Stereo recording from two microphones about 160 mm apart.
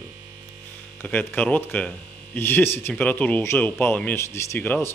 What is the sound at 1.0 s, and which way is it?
Speech, 10° left (ahead or behind).